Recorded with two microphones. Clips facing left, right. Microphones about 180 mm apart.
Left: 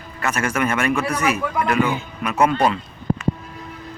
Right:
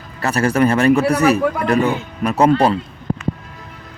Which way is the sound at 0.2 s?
35° right (ahead or behind).